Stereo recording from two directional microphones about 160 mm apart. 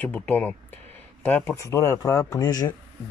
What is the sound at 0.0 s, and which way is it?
Speech, 10° left (ahead or behind).